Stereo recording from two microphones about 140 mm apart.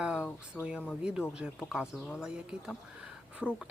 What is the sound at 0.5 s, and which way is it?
Speech, 5° right (ahead or behind).